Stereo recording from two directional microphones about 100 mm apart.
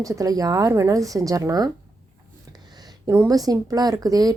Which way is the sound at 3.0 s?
30° right (ahead or behind).